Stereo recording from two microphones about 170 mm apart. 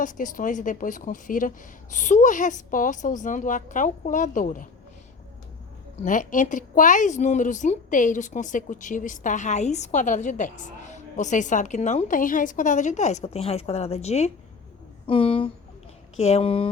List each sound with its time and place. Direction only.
0.0 s speech: 50° left (ahead or behind)
6.0 s speech: 50° left (ahead or behind); by 16.6 s 30° left (ahead or behind)